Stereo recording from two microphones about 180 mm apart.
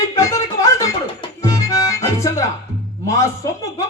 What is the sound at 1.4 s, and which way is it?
Music, 15° left (ahead or behind).